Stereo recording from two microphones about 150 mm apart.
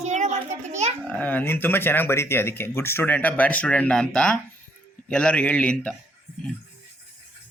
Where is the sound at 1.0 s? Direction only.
10° left (ahead or behind).